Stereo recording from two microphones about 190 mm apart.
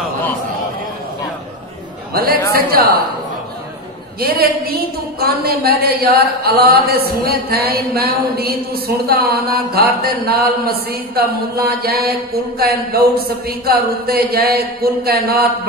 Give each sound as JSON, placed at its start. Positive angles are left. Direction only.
{"t": 2.1, "sound": "a woman's voice", "side_deg": -50}
{"t": 4.2, "sound": "a woman's voice", "side_deg": -55}